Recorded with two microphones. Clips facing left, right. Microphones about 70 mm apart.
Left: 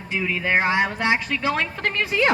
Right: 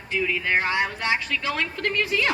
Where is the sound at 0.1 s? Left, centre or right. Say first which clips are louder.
Left 1 dB; centre.